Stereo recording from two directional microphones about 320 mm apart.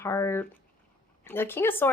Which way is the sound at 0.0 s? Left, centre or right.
Centre.